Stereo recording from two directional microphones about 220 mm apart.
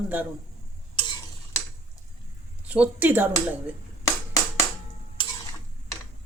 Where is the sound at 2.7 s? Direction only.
5° right (ahead or behind).